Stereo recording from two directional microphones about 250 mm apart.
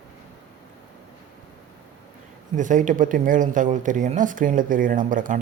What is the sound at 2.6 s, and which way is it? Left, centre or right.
Speech, right.